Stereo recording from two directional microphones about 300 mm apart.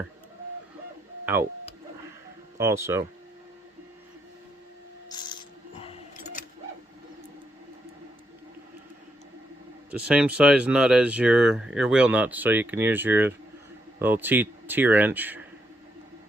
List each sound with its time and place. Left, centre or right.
1.2 s speech: centre
2.6 s speech: centre
5.1 s a sound: centre
9.9 s speech: centre